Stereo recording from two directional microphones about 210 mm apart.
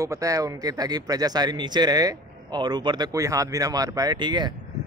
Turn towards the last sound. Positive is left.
turn(degrees=-20)  # may be behind; listen again after turning